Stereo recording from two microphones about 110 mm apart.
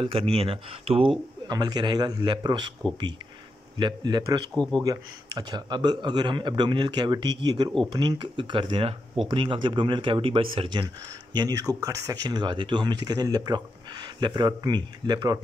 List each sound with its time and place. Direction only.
0.0 s speech: 55° right (ahead or behind)
1.5 s speech: 40° right (ahead or behind)
3.7 s speech: 40° right (ahead or behind)
11.3 s speech: 35° right (ahead or behind)